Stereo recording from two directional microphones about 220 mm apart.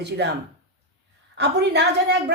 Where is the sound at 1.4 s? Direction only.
50° right (ahead or behind).